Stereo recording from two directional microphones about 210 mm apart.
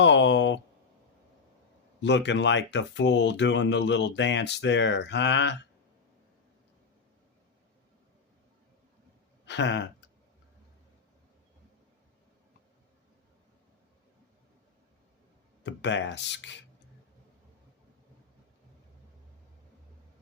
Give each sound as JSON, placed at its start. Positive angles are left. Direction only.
{"t": 0.0, "sound": "a sound", "side_deg": 60}
{"t": 2.0, "sound": "speech", "side_deg": 55}
{"t": 9.5, "sound": "speech", "side_deg": 60}
{"t": 15.6, "sound": "speech", "side_deg": 55}